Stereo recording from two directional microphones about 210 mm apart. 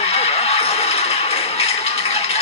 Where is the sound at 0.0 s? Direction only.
30° left (ahead or behind).